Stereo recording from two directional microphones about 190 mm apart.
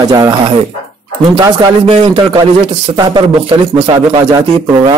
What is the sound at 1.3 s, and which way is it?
Speech, 20° right (ahead or behind).